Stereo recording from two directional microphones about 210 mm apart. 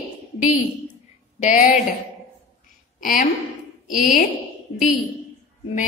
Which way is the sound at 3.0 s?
40° left (ahead or behind).